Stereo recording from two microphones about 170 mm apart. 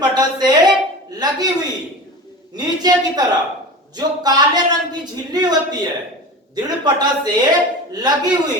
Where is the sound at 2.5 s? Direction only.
25° right (ahead or behind).